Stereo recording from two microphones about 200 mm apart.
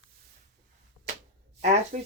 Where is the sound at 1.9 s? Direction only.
40° right (ahead or behind).